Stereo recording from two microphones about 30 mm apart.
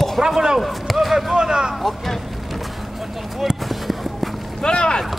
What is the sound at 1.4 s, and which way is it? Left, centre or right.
Speech, right.